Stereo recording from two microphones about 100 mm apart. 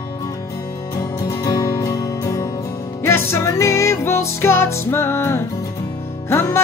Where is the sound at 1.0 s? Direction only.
40° left (ahead or behind).